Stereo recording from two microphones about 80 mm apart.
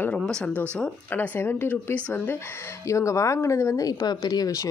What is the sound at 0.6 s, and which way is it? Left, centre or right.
Speech, centre.